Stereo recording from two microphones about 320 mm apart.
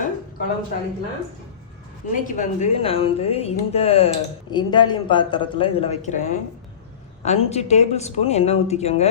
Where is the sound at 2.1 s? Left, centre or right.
Left.